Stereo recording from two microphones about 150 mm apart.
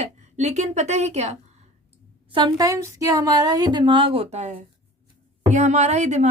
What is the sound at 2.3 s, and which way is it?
Speech, 25° right (ahead or behind).